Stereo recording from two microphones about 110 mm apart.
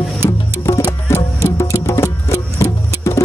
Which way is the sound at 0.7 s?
25° left (ahead or behind).